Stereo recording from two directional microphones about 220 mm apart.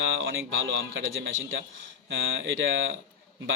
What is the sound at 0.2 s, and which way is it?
A man's voice, 65° right (ahead or behind).